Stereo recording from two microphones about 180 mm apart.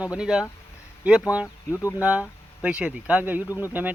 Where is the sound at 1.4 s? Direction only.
15° left (ahead or behind).